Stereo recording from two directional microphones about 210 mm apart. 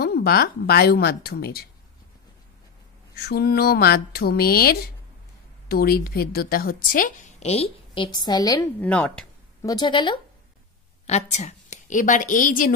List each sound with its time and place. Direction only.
0.0 s speech: 45° left (ahead or behind)
3.2 s a woman's voice: 50° left (ahead or behind); by 8.6 s 20° left (ahead or behind)
8.8 s speech: 5° left (ahead or behind)
9.6 s a woman's voice: 20° left (ahead or behind); by 12.7 s 40° left (ahead or behind)